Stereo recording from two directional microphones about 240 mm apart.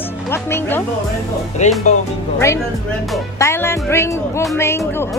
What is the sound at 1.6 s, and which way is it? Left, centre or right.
Speech, left.